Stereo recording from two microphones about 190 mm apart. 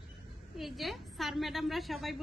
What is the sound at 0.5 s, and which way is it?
A woman's voice, centre (ahead or behind).